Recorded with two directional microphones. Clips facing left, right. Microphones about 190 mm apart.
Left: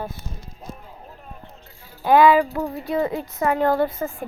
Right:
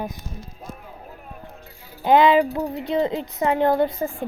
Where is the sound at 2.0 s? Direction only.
20° right (ahead or behind).